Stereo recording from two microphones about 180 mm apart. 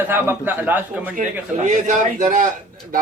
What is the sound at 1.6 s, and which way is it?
Speech, 45° right (ahead or behind).